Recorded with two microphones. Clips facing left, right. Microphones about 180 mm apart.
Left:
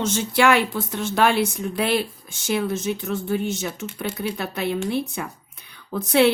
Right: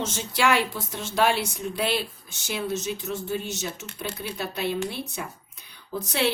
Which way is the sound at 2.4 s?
55° left (ahead or behind).